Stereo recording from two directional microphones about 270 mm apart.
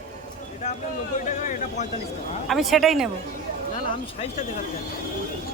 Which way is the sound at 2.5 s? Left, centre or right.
Centre.